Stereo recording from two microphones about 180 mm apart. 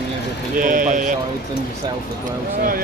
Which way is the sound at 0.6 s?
50° right (ahead or behind).